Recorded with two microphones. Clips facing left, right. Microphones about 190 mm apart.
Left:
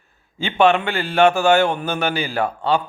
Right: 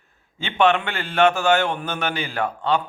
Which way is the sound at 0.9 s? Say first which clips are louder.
Left 6 dB; 30° left (ahead or behind).